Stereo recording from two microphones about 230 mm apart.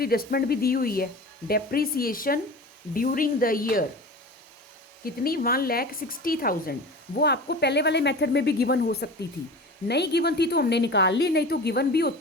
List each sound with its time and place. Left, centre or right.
0.0 s a woman's voice: left
5.0 s a woman's voice: left